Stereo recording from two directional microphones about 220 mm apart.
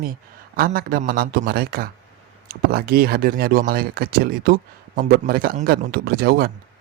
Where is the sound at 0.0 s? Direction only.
40° right (ahead or behind).